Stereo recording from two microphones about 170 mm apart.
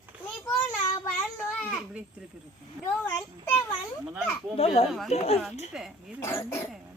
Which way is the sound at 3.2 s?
10° left (ahead or behind).